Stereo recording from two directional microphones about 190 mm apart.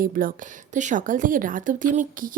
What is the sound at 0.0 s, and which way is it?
A woman's voice, 45° right (ahead or behind).